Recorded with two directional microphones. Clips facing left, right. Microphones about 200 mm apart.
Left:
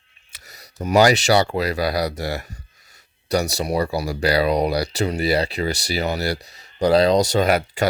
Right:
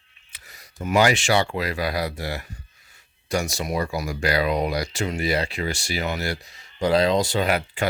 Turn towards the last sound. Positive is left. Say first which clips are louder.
# left 4 dB
turn(degrees=40)  # may be behind; listen again after turning